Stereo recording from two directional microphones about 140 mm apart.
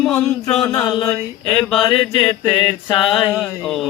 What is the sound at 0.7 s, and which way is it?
Mantra, 20° left (ahead or behind).